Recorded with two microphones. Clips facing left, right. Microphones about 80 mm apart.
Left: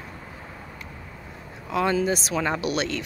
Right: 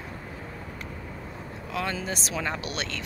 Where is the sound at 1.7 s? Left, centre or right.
Centre.